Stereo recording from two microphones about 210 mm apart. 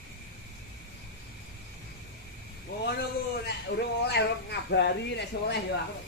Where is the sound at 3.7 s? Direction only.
50° left (ahead or behind).